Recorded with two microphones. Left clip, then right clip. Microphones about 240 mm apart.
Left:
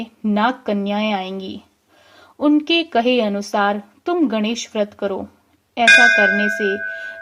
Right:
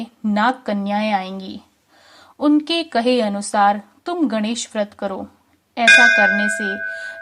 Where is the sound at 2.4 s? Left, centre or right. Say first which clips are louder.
Left 1 dB; right.